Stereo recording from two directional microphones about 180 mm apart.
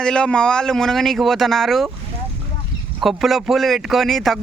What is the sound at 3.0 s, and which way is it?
A man's voice, centre (ahead or behind).